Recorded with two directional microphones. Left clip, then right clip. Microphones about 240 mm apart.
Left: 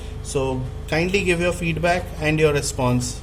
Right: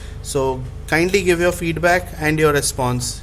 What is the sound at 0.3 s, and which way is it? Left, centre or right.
A man's voice, right.